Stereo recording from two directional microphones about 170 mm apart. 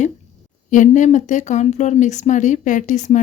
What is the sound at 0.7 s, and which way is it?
A woman's voice, 45° left (ahead or behind).